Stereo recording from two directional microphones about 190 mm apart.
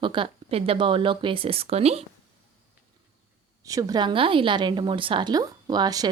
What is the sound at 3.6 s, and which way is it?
A woman's voice, 20° right (ahead or behind).